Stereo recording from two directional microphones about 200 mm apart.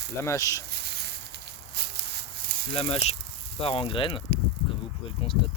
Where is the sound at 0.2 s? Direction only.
15° left (ahead or behind).